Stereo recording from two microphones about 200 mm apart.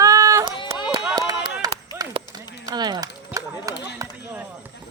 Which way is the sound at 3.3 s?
5° right (ahead or behind).